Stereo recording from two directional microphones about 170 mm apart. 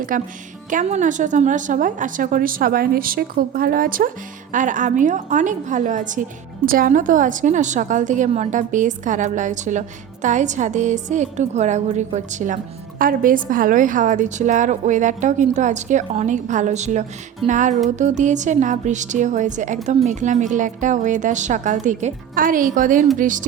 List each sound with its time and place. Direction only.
0.1 s a woman's voice: 55° right (ahead or behind)